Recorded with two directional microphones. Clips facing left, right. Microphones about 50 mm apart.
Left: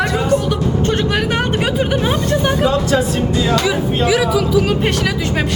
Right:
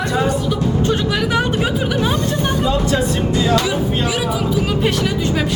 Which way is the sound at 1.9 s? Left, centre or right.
Left.